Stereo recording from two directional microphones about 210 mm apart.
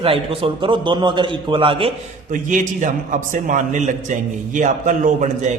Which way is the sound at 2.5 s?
40° right (ahead or behind).